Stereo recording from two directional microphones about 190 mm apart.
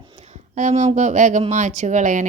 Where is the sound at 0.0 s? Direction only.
30° right (ahead or behind).